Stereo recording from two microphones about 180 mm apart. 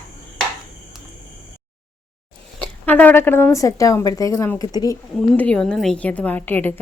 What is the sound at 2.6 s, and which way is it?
A woman's voice, 10° left (ahead or behind).